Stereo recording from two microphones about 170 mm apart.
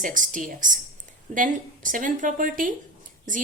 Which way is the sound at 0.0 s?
50° right (ahead or behind).